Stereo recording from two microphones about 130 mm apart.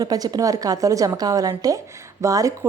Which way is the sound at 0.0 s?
30° right (ahead or behind).